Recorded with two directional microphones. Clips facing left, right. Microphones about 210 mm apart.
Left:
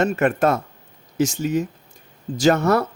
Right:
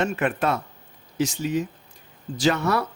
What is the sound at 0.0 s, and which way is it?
Speech, 45° left (ahead or behind).